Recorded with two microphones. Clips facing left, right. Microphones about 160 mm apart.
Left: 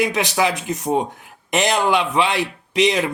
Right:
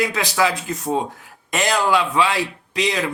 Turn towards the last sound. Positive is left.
turn(degrees=20)  # may be behind; listen again after turning